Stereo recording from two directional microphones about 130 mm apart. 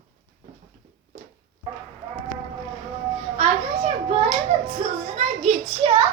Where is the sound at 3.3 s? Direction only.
65° right (ahead or behind).